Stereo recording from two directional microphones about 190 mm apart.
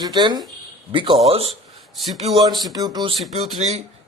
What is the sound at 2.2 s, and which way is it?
Speech, 25° right (ahead or behind).